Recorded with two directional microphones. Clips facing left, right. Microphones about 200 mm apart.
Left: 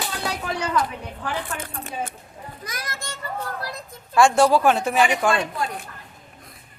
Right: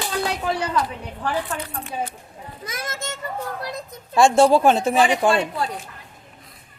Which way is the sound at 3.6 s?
20° right (ahead or behind).